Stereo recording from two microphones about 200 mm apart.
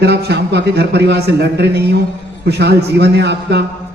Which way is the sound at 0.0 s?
55° right (ahead or behind).